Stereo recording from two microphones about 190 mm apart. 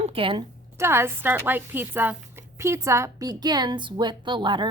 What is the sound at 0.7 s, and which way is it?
Speech, 15° right (ahead or behind).